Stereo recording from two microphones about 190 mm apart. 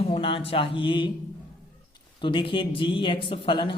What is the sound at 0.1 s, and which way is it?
Speech, 25° left (ahead or behind).